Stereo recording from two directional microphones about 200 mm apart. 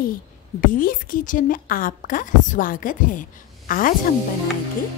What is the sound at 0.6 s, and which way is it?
A woman's voice, 45° left (ahead or behind).